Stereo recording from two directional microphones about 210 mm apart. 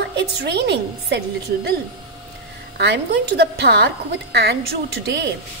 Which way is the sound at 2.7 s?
55° right (ahead or behind).